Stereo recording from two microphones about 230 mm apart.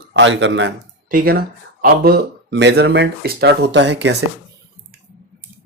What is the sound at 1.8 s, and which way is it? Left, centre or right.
Speech, right.